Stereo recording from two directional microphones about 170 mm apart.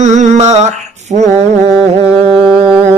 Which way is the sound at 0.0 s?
45° right (ahead or behind).